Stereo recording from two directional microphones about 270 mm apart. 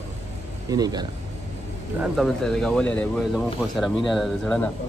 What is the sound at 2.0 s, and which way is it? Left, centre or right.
Speech, centre.